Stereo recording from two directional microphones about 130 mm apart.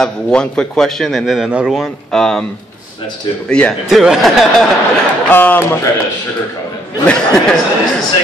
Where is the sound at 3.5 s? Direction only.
5° left (ahead or behind).